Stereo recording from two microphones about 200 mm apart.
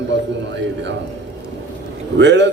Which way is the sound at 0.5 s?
60° right (ahead or behind).